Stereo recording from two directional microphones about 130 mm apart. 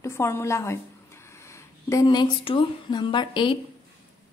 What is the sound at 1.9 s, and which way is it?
Speech, 30° left (ahead or behind).